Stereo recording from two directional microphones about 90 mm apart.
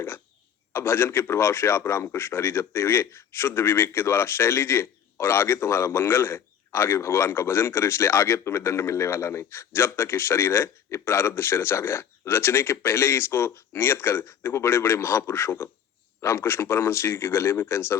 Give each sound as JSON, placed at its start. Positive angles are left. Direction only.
{"t": 0.7, "sound": "a man's voice", "side_deg": 30}